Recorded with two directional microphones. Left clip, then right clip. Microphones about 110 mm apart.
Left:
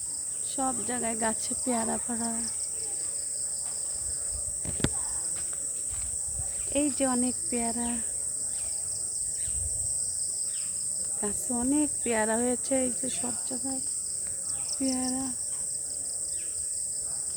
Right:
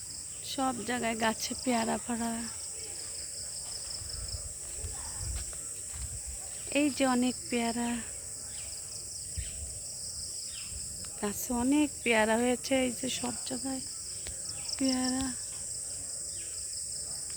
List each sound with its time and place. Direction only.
0.4 s cricket: 45° right (ahead or behind)
6.7 s cricket: 30° right (ahead or behind)
11.2 s speech: 25° right (ahead or behind)
13.0 s cricket: 35° right (ahead or behind)
14.8 s speech: 15° right (ahead or behind)